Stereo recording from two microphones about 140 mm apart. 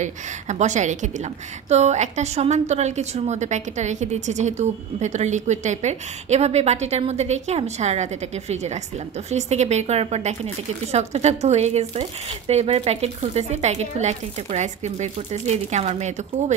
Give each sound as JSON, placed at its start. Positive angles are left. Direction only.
{"t": 0.0, "sound": "a woman's voice", "side_deg": -60}